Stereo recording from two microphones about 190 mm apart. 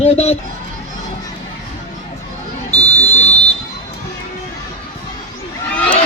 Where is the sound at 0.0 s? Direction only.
30° left (ahead or behind).